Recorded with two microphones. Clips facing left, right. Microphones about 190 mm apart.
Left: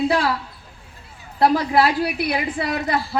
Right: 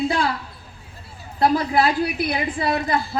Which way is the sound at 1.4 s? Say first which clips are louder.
Left 1 dB; 75° left (ahead or behind).